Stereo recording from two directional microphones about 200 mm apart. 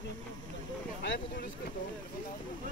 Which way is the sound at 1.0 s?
60° left (ahead or behind).